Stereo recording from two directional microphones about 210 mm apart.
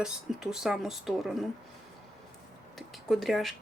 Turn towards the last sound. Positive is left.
turn(degrees=0)  # may be behind; listen again after turning